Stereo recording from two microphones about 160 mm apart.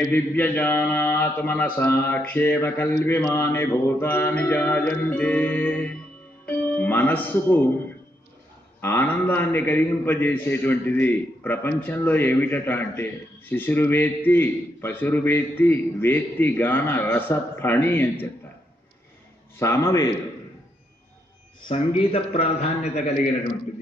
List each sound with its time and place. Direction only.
0.1 s a man's voice: 10° left (ahead or behind)
8.8 s a man's voice: 15° left (ahead or behind)
19.6 s a man's voice: 20° left (ahead or behind)
21.6 s a man's voice: 35° left (ahead or behind)